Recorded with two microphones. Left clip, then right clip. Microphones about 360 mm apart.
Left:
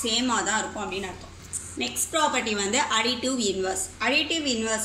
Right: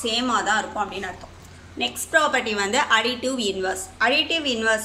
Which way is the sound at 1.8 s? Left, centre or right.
Right.